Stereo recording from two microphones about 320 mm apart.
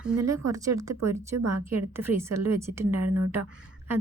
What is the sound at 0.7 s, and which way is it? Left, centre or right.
A woman's voice, right.